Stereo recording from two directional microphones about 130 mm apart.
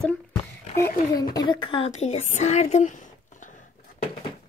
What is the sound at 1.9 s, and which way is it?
Speech, 60° left (ahead or behind).